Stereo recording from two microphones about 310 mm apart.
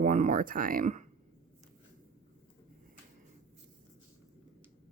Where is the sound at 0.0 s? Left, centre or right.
Right.